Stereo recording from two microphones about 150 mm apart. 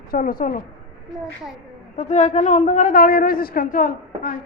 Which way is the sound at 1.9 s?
50° left (ahead or behind).